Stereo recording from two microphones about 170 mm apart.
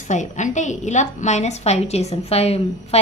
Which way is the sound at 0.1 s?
45° left (ahead or behind).